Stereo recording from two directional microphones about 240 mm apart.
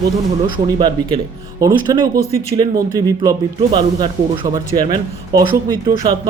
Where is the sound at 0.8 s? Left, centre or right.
Centre.